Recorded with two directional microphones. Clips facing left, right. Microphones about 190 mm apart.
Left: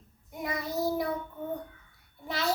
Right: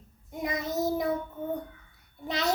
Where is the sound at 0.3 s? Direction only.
20° right (ahead or behind).